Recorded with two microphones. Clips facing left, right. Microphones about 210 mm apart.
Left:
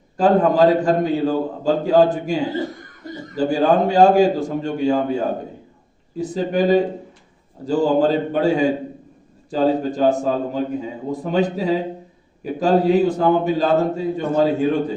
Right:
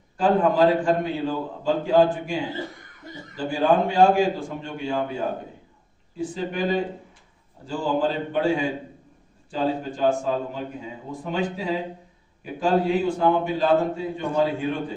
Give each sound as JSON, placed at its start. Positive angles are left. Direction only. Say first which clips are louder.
{"t": 0.2, "sound": "a man's voice", "louder": "left 4 dB", "side_deg": 40}